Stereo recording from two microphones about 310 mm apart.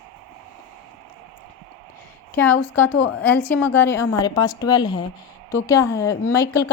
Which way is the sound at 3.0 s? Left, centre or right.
Left.